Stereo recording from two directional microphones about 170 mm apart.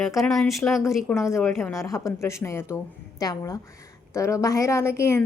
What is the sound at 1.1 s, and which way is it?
A woman's voice, 15° left (ahead or behind).